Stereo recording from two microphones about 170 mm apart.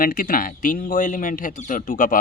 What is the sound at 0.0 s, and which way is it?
Speech, 55° left (ahead or behind).